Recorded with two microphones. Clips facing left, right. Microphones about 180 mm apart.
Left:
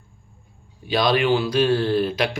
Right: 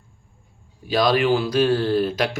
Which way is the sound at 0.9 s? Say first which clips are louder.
Right 1 dB; 45° right (ahead or behind).